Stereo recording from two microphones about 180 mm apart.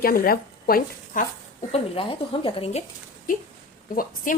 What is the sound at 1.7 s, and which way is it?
Speech, 30° left (ahead or behind).